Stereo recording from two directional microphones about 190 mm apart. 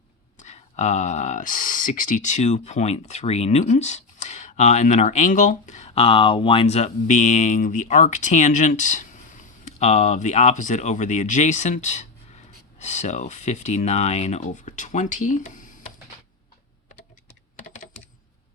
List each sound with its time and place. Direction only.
0.3 s speech: 35° left (ahead or behind)
17.6 s typing: 40° left (ahead or behind)